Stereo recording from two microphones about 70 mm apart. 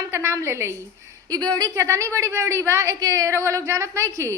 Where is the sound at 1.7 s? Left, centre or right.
Right.